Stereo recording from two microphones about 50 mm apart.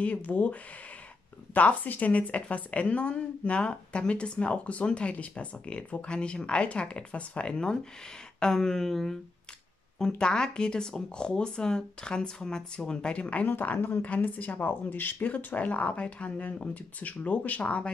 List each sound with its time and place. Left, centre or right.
0.0 s a woman's voice: left
13.5 s a woman's voice: left